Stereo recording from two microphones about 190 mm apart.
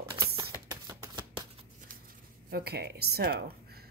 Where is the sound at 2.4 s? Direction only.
55° right (ahead or behind).